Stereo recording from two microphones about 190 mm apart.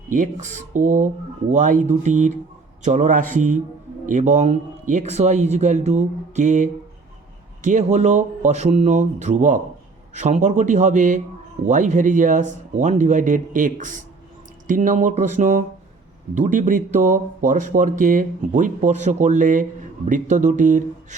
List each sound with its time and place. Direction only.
0.1 s speech: 40° right (ahead or behind)